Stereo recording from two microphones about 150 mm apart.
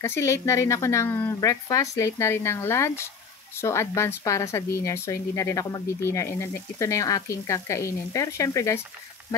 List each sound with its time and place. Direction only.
0.0 s speech: 20° left (ahead or behind)